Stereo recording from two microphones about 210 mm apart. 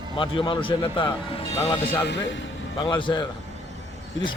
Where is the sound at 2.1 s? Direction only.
60° left (ahead or behind).